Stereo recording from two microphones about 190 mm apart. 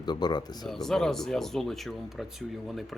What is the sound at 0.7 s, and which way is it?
Speech, centre (ahead or behind).